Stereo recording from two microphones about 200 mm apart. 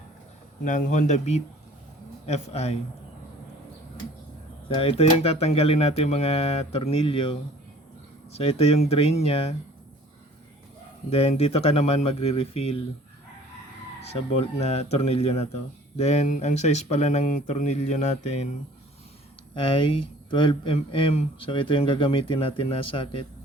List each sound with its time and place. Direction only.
0.6 s speech: 40° left (ahead or behind)
4.7 s speech: 30° left (ahead or behind)
8.4 s speech: 30° left (ahead or behind)
11.1 s speech: 30° left (ahead or behind)
14.1 s speech: 30° left (ahead or behind)
19.5 s speech: 25° left (ahead or behind)